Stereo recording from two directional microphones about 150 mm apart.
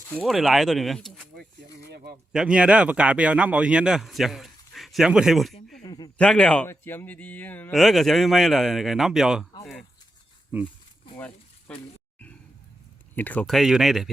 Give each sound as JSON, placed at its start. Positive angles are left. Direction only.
{"t": 0.1, "sound": "a man's voice", "side_deg": 0}
{"t": 2.3, "sound": "a man's voice", "side_deg": -5}
{"t": 5.8, "sound": "a sound", "side_deg": 25}
{"t": 6.1, "sound": "a man's voice", "side_deg": 5}
{"t": 7.7, "sound": "a man's voice", "side_deg": 0}
{"t": 11.7, "sound": "speech", "side_deg": 5}
{"t": 13.1, "sound": "a man's voice", "side_deg": 10}